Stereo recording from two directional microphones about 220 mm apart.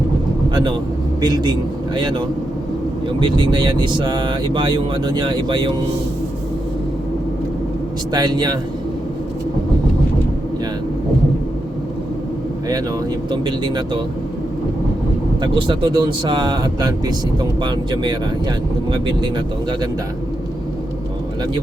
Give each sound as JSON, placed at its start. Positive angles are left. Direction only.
{"t": 1.2, "sound": "speech", "side_deg": -20}
{"t": 8.1, "sound": "speech", "side_deg": -20}
{"t": 13.3, "sound": "speech", "side_deg": -20}
{"t": 15.4, "sound": "speech", "side_deg": -20}